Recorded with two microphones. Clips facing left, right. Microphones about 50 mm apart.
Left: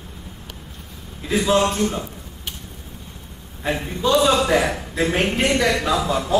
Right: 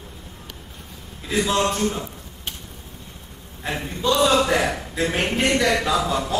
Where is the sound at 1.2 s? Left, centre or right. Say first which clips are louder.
Left 3 dB; centre.